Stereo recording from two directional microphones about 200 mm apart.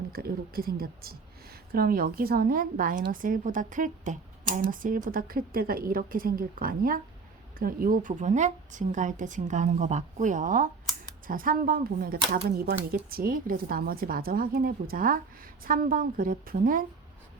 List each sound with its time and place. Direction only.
0.1 s a woman's voice: 50° right (ahead or behind)